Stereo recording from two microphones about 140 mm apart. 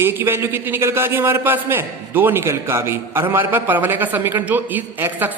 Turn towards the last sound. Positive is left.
turn(degrees=-10)  # may be behind; listen again after turning